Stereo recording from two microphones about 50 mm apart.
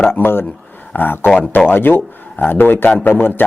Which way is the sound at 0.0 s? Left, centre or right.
Left.